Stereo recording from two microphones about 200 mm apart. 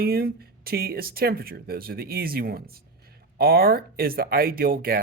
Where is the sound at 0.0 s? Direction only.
50° right (ahead or behind).